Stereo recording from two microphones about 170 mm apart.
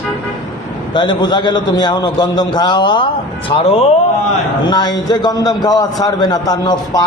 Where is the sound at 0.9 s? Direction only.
25° left (ahead or behind).